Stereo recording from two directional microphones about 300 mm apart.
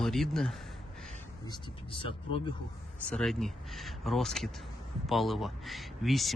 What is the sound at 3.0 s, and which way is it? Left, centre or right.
Speech, centre.